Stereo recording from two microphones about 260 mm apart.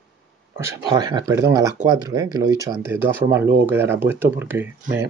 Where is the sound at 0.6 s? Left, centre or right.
Centre.